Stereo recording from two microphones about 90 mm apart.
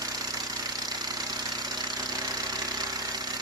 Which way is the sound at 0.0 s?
45° right (ahead or behind).